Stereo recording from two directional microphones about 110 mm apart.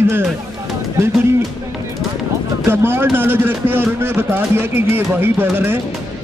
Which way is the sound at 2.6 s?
20° right (ahead or behind).